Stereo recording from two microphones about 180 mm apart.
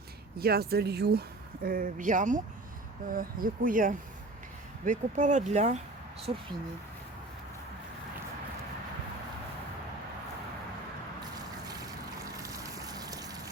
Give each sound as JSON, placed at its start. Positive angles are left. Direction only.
{"t": 0.3, "sound": "speech", "side_deg": -60}
{"t": 1.6, "sound": "speech", "side_deg": -50}
{"t": 11.7, "sound": "boat", "side_deg": -20}